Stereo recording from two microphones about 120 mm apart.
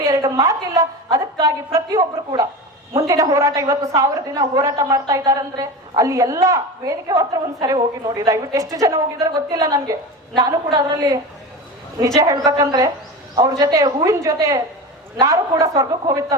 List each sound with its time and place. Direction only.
0.0 s a woman's voice: 30° right (ahead or behind)